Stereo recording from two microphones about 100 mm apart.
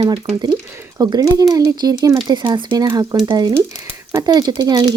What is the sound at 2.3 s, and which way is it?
Speech, 50° right (ahead or behind).